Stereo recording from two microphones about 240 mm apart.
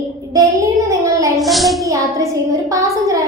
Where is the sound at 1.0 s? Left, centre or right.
Centre.